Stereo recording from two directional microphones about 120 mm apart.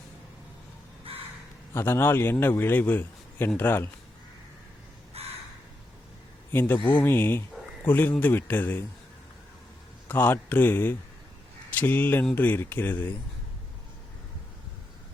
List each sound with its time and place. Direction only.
1.1 s crow: 50° right (ahead or behind)
1.7 s a man's voice: 20° left (ahead or behind)
5.2 s crow: 55° right (ahead or behind)
6.5 s a man's voice: 20° left (ahead or behind)
10.1 s a man's voice: 20° left (ahead or behind)